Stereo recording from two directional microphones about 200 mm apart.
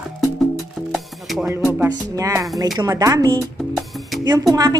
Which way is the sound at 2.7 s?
20° right (ahead or behind).